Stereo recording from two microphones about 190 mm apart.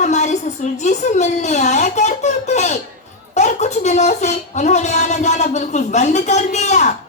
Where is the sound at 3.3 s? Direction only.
35° left (ahead or behind).